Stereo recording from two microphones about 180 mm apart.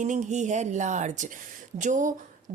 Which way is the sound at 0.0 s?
40° right (ahead or behind).